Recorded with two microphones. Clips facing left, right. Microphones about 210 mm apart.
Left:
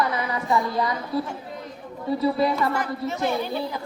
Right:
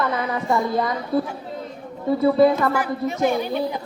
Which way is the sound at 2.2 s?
50° right (ahead or behind).